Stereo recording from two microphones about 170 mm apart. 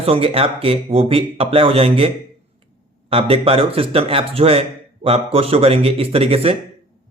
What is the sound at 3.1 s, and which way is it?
A man's voice, 35° right (ahead or behind).